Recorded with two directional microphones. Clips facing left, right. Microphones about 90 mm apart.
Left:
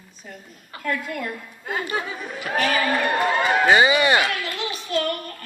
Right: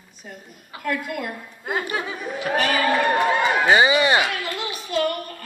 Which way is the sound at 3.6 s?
20° right (ahead or behind).